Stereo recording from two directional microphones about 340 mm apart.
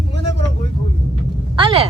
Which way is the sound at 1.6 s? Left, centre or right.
Centre.